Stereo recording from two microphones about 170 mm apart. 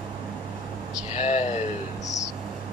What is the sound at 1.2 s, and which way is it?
Speech, 45° left (ahead or behind).